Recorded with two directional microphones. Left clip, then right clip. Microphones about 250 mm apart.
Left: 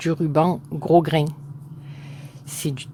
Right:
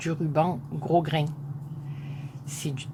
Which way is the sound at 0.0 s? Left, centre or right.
Left.